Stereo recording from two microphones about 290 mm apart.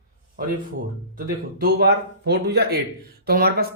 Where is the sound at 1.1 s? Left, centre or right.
Right.